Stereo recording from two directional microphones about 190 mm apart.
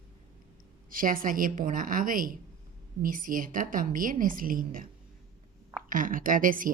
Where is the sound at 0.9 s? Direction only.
50° right (ahead or behind).